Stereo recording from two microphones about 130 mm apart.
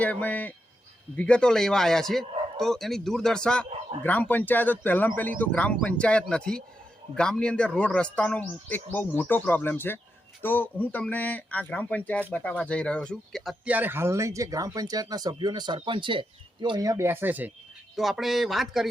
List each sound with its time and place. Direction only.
0.0 s a man's voice: 10° left (ahead or behind)
13.7 s speech: 15° right (ahead or behind)
17.9 s a man's voice: centre (ahead or behind)